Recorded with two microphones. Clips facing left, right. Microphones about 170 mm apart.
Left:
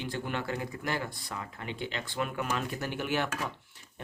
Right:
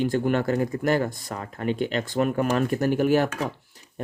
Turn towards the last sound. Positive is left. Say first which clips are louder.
# right 11 dB
turn(degrees=-40)  # may be behind; listen again after turning